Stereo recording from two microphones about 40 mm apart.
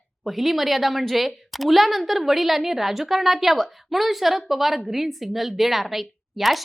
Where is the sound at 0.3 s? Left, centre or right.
Centre.